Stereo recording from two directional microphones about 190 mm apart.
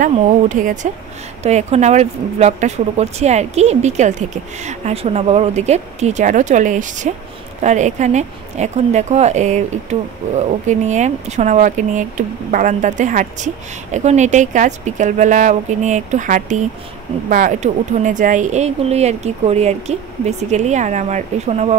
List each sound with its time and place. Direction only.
0.0 s speech: 45° right (ahead or behind)